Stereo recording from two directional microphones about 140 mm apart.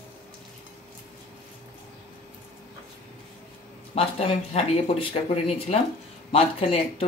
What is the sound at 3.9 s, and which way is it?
Speech, 45° left (ahead or behind).